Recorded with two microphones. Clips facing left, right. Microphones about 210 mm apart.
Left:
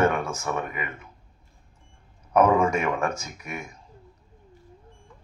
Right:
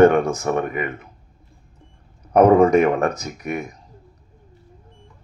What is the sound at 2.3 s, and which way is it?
Speech, 35° right (ahead or behind).